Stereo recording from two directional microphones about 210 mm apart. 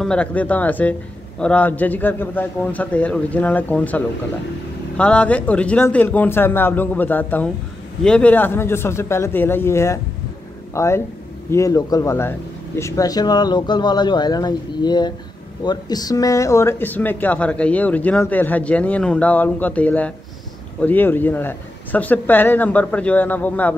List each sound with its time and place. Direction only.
0.0 s speech: 5° left (ahead or behind)